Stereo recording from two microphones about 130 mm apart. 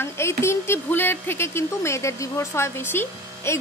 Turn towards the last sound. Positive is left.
turn(degrees=20)  # may be behind; listen again after turning